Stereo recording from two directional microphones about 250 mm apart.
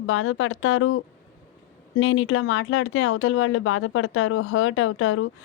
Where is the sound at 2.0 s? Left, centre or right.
Left.